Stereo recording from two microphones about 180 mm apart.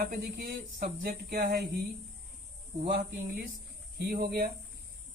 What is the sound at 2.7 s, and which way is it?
Speech, 40° right (ahead or behind).